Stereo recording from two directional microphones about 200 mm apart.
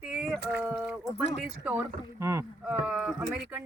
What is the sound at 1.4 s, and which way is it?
Speech, 10° right (ahead or behind).